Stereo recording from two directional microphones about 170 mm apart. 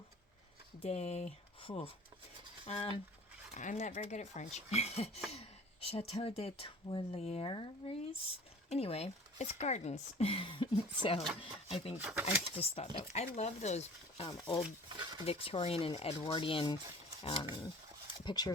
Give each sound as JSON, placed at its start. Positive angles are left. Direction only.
{"t": 0.8, "sound": "speech", "side_deg": 40}
{"t": 3.5, "sound": "speech", "side_deg": 45}
{"t": 11.9, "sound": "speech", "side_deg": -10}
{"t": 12.2, "sound": "speech", "side_deg": 40}
{"t": 14.8, "sound": "speech", "side_deg": -25}
{"t": 15.3, "sound": "speech", "side_deg": 35}
{"t": 18.3, "sound": "speech", "side_deg": 25}